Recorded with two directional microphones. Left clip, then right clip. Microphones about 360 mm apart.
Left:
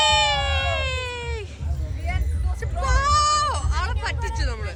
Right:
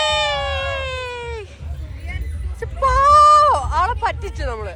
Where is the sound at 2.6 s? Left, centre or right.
Centre.